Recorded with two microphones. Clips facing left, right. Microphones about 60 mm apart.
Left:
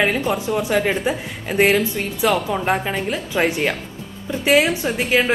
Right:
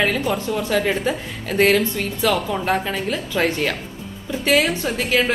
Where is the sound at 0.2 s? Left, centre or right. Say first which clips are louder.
Left 1 dB; centre.